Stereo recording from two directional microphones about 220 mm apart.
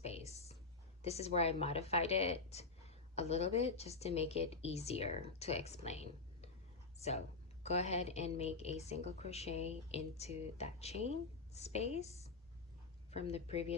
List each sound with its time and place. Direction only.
0.0 s a sound: 30° left (ahead or behind)
1.0 s speech: 30° left (ahead or behind)
7.6 s speech: 30° left (ahead or behind)